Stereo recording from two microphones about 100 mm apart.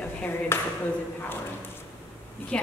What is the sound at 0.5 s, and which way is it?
Speech, 25° left (ahead or behind).